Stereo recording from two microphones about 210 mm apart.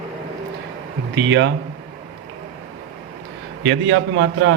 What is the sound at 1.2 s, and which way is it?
Speech, 55° right (ahead or behind).